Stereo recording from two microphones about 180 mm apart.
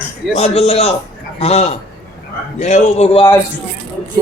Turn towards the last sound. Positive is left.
turn(degrees=40)  # may be behind; listen again after turning